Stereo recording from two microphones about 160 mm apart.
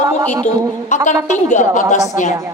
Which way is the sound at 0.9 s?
50° left (ahead or behind).